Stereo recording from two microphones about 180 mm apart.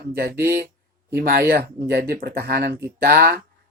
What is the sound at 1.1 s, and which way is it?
Speech, 60° right (ahead or behind).